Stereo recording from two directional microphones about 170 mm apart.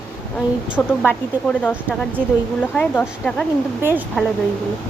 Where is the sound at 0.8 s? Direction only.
10° left (ahead or behind).